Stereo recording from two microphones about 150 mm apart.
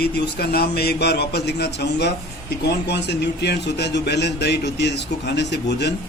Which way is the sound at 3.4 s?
90° left.